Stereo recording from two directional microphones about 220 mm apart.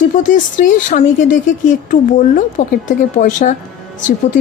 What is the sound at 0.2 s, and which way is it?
Speech, 35° left (ahead or behind).